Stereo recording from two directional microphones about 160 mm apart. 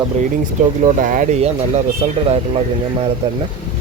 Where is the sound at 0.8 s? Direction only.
55° right (ahead or behind).